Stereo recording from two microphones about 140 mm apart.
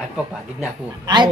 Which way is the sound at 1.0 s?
30° right (ahead or behind).